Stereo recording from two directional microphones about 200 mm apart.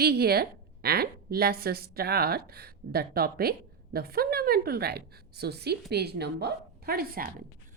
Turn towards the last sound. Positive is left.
turn(degrees=-50)  # may be behind; listen again after turning